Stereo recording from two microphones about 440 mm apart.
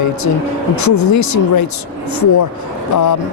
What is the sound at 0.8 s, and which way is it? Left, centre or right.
Speech, left.